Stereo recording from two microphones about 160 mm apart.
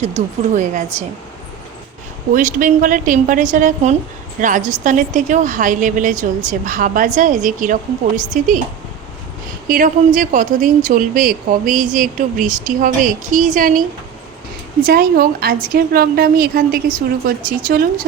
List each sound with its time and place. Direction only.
0.5 s a woman's voice: 50° right (ahead or behind)
2.3 s a woman's voice: 55° right (ahead or behind)
9.6 s a woman's voice: 55° right (ahead or behind)
14.8 s a woman's voice: 70° right (ahead or behind)